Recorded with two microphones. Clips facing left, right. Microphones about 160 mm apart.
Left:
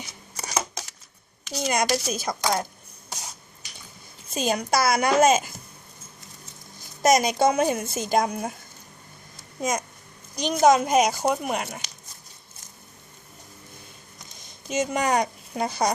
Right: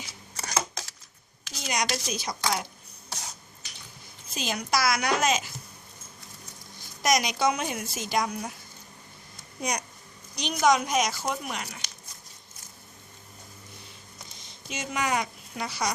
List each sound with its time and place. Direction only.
0.3 s shuffling cards: 15° left (ahead or behind)
1.6 s a woman's voice: 50° left (ahead or behind)
4.4 s a woman's voice: 50° left (ahead or behind)
7.2 s a woman's voice: 50° left (ahead or behind)
9.6 s a child's voice: 45° left (ahead or behind)
14.7 s speech: 40° left (ahead or behind)